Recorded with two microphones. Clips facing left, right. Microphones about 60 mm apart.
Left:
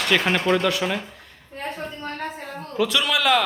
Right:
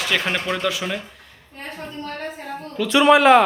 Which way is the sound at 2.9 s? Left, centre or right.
Right.